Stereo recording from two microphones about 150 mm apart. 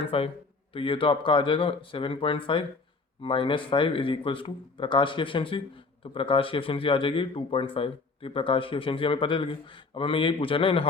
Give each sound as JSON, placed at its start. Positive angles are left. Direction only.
{"t": 0.1, "sound": "speech", "side_deg": 40}